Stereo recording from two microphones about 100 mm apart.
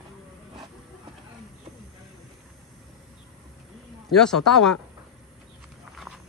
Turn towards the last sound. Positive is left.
turn(degrees=5)  # may be behind; listen again after turning